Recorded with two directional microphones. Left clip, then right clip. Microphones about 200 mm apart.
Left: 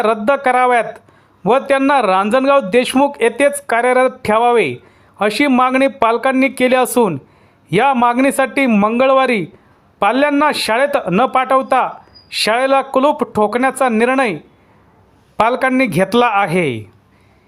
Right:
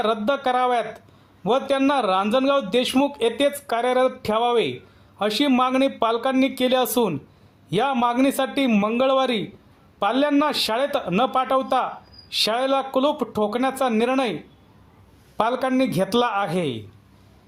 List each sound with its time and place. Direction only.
0.0 s a man's voice: 25° left (ahead or behind)
15.4 s a man's voice: 30° left (ahead or behind)